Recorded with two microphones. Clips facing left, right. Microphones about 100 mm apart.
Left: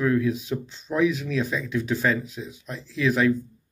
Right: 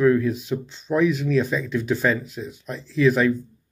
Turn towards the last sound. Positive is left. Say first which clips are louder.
# right 3 dB
turn(degrees=0)  # may be behind; listen again after turning